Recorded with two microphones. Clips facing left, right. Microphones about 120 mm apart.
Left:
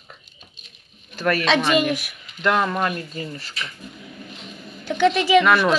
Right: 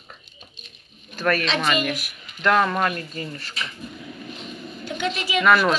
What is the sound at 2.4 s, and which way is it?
Speech, 10° left (ahead or behind).